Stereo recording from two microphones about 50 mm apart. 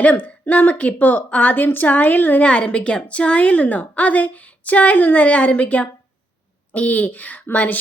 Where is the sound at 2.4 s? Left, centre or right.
Left.